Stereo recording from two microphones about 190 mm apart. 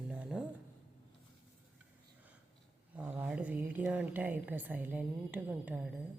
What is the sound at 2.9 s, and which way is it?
A woman's voice, 10° right (ahead or behind).